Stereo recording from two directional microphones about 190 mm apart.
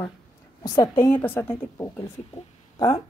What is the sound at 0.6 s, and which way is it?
A woman's voice, 20° left (ahead or behind).